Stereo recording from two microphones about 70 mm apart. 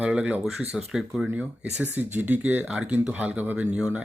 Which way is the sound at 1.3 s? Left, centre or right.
Centre.